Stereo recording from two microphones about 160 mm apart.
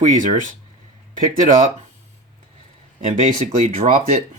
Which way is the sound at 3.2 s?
45° right (ahead or behind).